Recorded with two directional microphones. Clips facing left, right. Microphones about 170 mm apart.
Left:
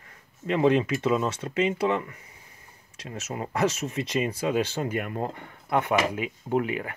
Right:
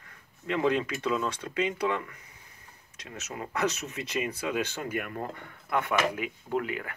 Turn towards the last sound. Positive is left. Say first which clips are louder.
# left 5 dB
turn(degrees=20)  # may be behind; listen again after turning